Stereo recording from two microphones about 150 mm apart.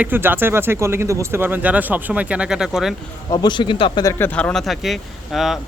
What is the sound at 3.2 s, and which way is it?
Speech, 30° left (ahead or behind).